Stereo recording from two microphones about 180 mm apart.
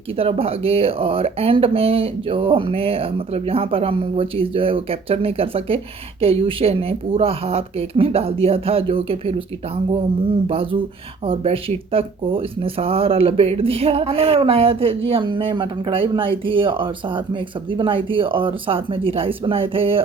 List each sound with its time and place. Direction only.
0.2 s speech: 30° right (ahead or behind)
10.5 s speech: 30° right (ahead or behind)